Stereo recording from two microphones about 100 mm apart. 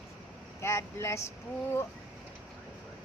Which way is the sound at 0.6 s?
25° left (ahead or behind).